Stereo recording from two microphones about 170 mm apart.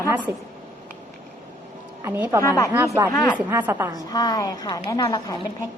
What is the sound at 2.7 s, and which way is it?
A woman's voice, 15° right (ahead or behind).